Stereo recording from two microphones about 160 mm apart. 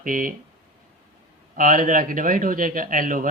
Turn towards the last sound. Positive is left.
turn(degrees=-60)  # may be behind; listen again after turning